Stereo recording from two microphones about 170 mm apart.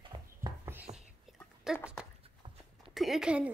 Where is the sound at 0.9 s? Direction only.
20° right (ahead or behind).